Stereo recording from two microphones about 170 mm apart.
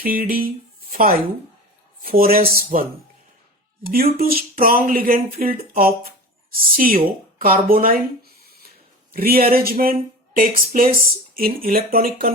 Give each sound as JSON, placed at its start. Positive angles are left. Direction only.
{"t": 0.0, "sound": "speech", "side_deg": -60}
{"t": 0.9, "sound": "music", "side_deg": -55}
{"t": 2.0, "sound": "speech", "side_deg": -60}
{"t": 3.9, "sound": "speech", "side_deg": -60}